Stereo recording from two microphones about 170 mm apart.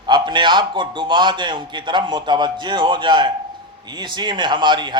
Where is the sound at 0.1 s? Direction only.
25° right (ahead or behind).